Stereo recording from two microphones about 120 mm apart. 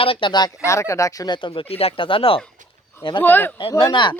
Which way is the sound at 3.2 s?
15° left (ahead or behind).